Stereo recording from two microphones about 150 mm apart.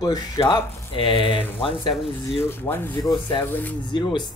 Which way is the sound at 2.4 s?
15° left (ahead or behind).